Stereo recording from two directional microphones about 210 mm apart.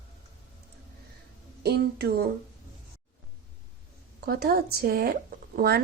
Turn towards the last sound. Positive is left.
turn(degrees=-45)  # may be behind; listen again after turning